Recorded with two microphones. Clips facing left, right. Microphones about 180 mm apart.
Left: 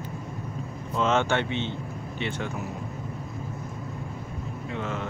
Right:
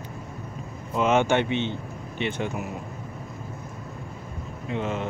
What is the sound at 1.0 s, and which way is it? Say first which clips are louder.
Speech: right 3 dB; 15° right (ahead or behind).